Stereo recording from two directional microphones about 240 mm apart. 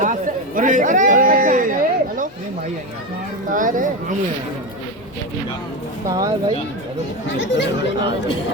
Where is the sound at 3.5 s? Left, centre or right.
Right.